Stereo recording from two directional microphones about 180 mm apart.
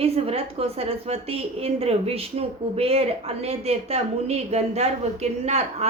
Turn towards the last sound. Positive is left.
turn(degrees=-35)  # may be behind; listen again after turning